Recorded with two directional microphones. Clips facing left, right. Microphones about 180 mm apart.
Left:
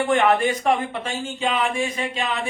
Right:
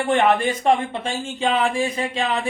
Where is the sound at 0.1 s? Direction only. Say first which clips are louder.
Right 2 dB; 30° right (ahead or behind).